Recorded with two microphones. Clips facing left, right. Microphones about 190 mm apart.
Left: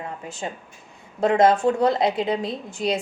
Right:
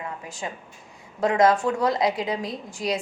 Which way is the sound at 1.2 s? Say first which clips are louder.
Left 2 dB; 25° left (ahead or behind).